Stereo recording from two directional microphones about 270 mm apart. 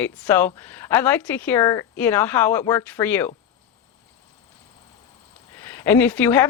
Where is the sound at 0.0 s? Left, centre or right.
Centre.